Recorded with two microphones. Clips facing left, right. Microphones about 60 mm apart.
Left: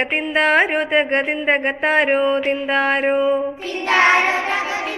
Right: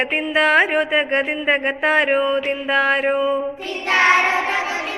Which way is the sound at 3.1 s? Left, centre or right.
Left.